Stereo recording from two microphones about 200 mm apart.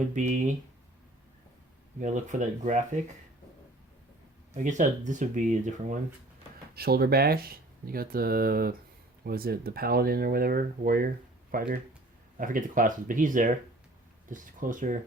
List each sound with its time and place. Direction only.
0.1 s speech: 40° right (ahead or behind)
2.0 s speech: 40° right (ahead or behind)
4.5 s speech: 40° right (ahead or behind)
6.7 s speech: 50° right (ahead or behind)